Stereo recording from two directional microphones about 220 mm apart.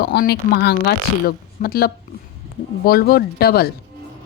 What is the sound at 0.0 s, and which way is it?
Speech, 45° left (ahead or behind).